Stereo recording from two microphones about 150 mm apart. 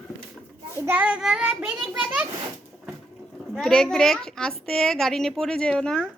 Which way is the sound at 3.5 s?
5° left (ahead or behind).